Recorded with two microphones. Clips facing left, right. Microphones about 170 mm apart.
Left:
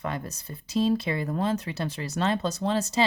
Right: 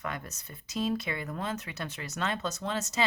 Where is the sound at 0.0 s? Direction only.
30° left (ahead or behind).